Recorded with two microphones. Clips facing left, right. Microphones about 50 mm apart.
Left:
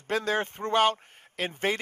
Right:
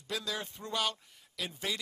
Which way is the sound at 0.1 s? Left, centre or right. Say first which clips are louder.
Left 10 dB; left.